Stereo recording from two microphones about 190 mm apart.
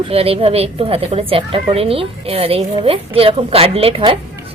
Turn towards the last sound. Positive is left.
turn(degrees=-30)  # may be behind; listen again after turning